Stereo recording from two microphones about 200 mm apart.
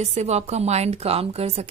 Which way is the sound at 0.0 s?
35° right (ahead or behind).